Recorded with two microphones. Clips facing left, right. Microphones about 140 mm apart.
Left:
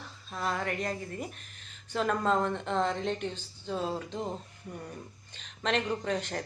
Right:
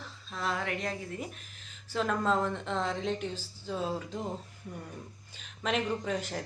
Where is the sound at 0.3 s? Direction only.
Centre (ahead or behind).